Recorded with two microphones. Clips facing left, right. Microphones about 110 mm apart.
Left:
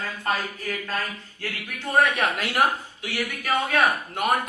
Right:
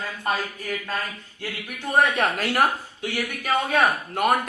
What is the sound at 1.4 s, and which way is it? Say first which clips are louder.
Speech: right 1 dB; 15° right (ahead or behind).